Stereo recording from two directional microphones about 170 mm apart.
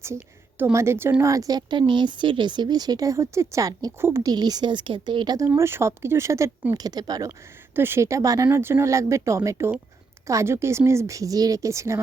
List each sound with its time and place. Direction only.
0.6 s speech: 15° right (ahead or behind)
5.5 s speech: 15° right (ahead or behind)